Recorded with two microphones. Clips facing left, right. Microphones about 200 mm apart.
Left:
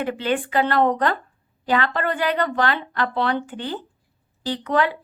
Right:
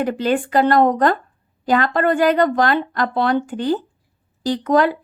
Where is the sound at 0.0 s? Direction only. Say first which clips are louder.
Right 4 dB; 40° right (ahead or behind).